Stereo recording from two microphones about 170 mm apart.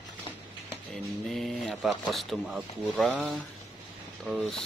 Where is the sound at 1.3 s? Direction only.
Centre (ahead or behind).